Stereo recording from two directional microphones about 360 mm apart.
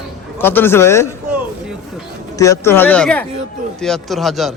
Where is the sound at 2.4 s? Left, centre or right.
Centre.